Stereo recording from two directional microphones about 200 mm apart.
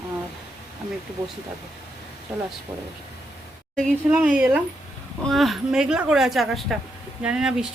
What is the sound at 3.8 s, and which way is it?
A woman's voice, centre (ahead or behind).